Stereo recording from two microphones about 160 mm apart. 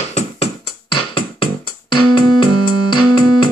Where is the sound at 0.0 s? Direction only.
45° left (ahead or behind).